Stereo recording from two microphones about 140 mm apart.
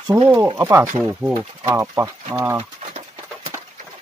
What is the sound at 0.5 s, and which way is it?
Speech, 15° right (ahead or behind).